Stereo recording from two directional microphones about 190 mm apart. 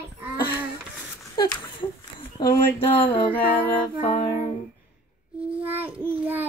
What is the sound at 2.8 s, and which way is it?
Speech, 30° left (ahead or behind).